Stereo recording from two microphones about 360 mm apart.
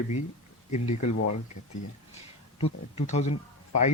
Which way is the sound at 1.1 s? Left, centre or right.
Left.